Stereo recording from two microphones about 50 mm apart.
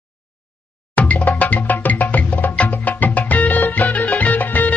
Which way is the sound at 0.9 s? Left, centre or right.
Left.